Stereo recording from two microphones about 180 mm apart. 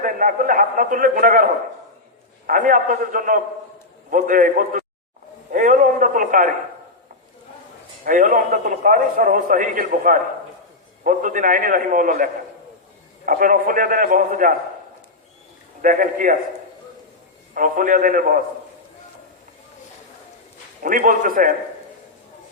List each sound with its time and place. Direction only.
0.0 s a man's voice: 50° right (ahead or behind)
2.5 s a man's voice: 50° right (ahead or behind)
8.0 s a man's voice: 50° right (ahead or behind)
15.8 s a man's voice: 45° right (ahead or behind)
17.5 s a man's voice: 50° right (ahead or behind)
20.8 s a man's voice: 50° right (ahead or behind)